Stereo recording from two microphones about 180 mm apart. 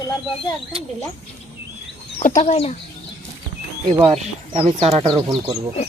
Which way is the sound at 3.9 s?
25° right (ahead or behind).